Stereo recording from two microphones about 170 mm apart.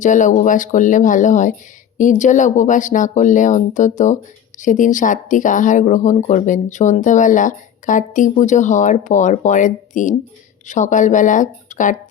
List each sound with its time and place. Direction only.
0.0 s speech: 50° left (ahead or behind)